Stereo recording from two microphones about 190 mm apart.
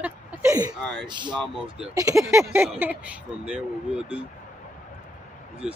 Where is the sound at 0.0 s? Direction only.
15° right (ahead or behind).